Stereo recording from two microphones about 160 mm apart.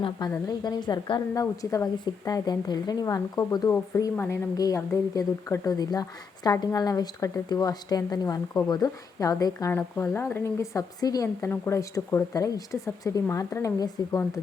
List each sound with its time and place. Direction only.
0.3 s speech: 25° left (ahead or behind)